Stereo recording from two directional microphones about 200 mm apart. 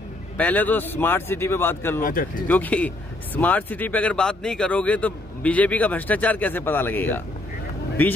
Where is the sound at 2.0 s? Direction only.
45° left (ahead or behind).